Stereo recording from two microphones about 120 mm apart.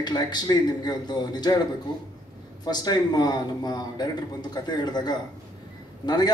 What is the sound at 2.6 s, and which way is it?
Speech, 35° left (ahead or behind).